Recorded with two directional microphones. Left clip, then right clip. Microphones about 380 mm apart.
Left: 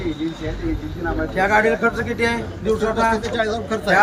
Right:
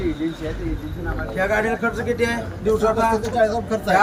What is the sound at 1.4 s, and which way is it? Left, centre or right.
A man's voice, centre.